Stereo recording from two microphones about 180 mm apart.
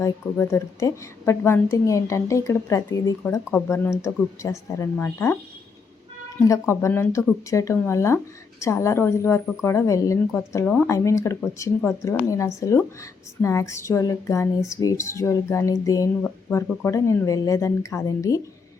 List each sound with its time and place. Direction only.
0.0 s a woman's voice: 15° left (ahead or behind)
6.4 s a woman's voice: 15° left (ahead or behind)